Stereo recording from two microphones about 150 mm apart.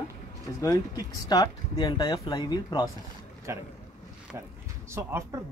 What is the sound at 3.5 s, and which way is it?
Speech, 20° right (ahead or behind).